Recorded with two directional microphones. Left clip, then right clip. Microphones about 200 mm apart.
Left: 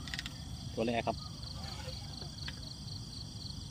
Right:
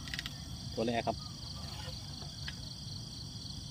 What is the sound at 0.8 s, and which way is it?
Cricket, 5° left (ahead or behind).